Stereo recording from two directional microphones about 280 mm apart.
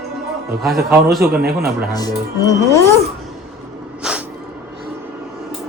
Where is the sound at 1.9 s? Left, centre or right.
Centre.